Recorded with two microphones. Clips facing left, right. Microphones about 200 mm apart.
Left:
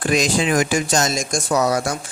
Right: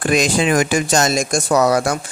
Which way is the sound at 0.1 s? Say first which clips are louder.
Right 2 dB; 60° right (ahead or behind).